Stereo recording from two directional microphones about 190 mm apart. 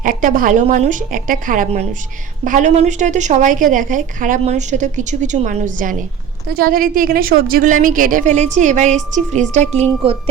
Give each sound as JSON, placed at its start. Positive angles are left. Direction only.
{"t": 0.0, "sound": "a woman's voice", "side_deg": -45}